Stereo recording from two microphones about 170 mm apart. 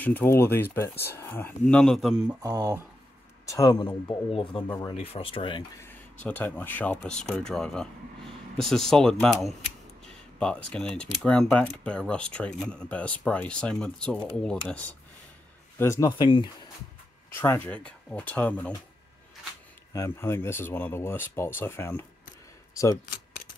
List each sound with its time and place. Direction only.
0.0 s speech: 10° left (ahead or behind)
1.7 s speech: 5° left (ahead or behind)
2.4 s speech: 20° right (ahead or behind)
3.4 s speech: 20° left (ahead or behind)
6.2 s speech: 10° left (ahead or behind); by 16.4 s 25° left (ahead or behind)
17.3 s speech: 10° left (ahead or behind)
19.9 s speech: 15° left (ahead or behind)